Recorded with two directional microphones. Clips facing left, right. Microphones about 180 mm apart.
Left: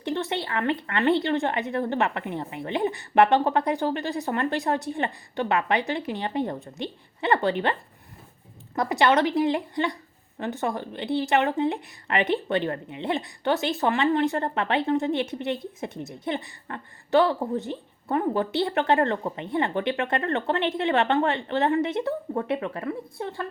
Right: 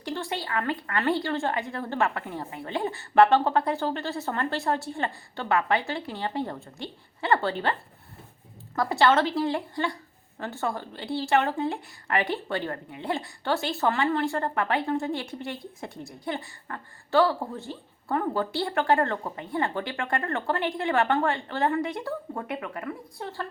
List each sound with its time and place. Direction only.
0.0 s a woman's voice: 20° left (ahead or behind)